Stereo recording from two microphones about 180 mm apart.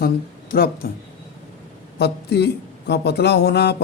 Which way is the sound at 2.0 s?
70° left (ahead or behind).